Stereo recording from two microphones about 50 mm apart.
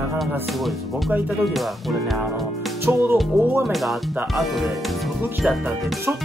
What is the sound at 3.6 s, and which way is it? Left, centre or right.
Speech, centre.